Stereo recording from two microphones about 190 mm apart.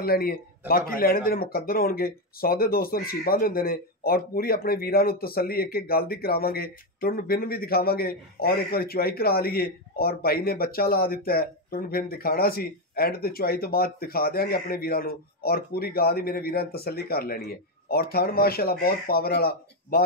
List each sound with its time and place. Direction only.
0.0 s a man's voice: 50° left (ahead or behind)